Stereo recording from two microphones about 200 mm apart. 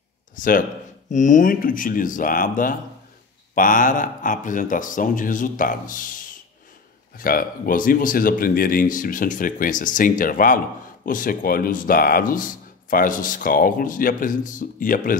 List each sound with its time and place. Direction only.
0.4 s speech: 45° left (ahead or behind)